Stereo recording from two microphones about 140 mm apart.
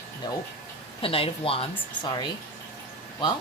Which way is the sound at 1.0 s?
40° left (ahead or behind).